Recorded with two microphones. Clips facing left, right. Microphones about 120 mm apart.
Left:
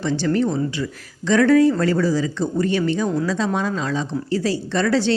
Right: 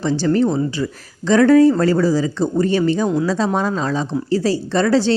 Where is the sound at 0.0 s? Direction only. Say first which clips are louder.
Right 3 dB; 35° right (ahead or behind).